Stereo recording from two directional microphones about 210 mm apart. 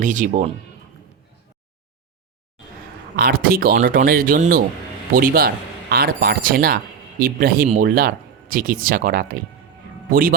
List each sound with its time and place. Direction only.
0.0 s speech: 35° right (ahead or behind)
3.2 s speech: 45° right (ahead or behind)